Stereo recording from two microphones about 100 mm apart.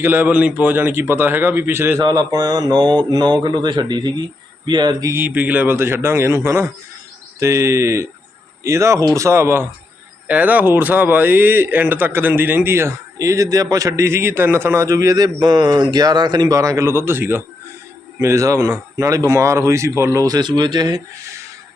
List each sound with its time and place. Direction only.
0.0 s speech: 20° right (ahead or behind)
2.0 s speech: 40° right (ahead or behind)
5.1 s speech: 20° right (ahead or behind); by 21.0 s 45° right (ahead or behind)